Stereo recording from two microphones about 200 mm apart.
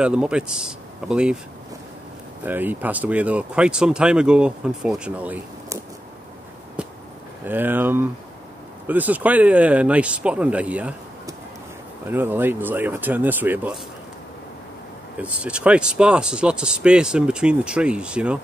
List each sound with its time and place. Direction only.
0.0 s speech: 5° right (ahead or behind)
2.4 s speech: 10° right (ahead or behind)
6.8 s a sound: 5° right (ahead or behind)
7.4 s speech: 10° right (ahead or behind)
12.1 s speech: 10° right (ahead or behind)
15.1 s speech: 5° right (ahead or behind)